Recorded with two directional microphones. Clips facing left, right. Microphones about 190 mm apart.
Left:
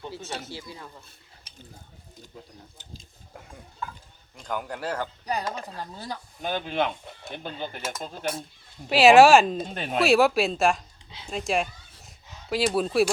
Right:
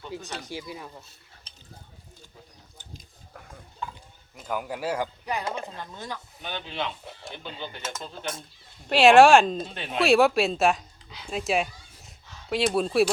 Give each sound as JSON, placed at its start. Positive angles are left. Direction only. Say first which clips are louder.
{"t": 0.4, "sound": "a man's voice", "louder": "right 3 dB", "side_deg": -15}
{"t": 3.0, "sound": "speech", "louder": "left 1 dB", "side_deg": 20}
{"t": 4.4, "sound": "a man's voice", "louder": "right 1 dB", "side_deg": -5}
{"t": 5.2, "sound": "speech", "louder": "even", "side_deg": 35}
{"t": 8.9, "sound": "speech", "louder": "left 1 dB", "side_deg": 5}
{"t": 9.6, "sound": "speech", "louder": "left 4 dB", "side_deg": 45}
{"t": 10.0, "sound": "speech", "louder": "even", "side_deg": 0}
{"t": 11.3, "sound": "a sound", "louder": "even", "side_deg": 0}
{"t": 12.5, "sound": "speech", "louder": "even", "side_deg": 0}